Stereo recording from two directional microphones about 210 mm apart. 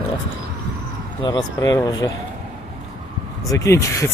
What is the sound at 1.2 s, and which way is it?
Speech, 20° left (ahead or behind).